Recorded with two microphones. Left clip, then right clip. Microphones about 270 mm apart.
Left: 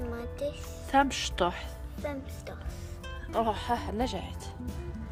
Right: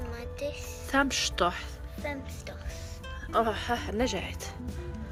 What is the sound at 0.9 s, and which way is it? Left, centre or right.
Speech, centre.